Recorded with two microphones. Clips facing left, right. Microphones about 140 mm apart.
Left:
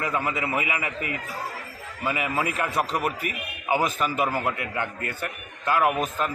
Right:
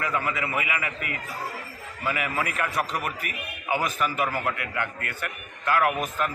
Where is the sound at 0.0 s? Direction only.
25° left (ahead or behind).